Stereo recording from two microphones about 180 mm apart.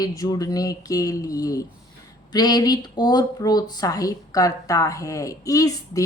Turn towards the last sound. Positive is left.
turn(degrees=20)  # may be behind; listen again after turning